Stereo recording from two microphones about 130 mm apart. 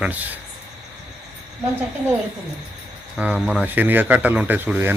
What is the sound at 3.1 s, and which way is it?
Speech, 5° right (ahead or behind).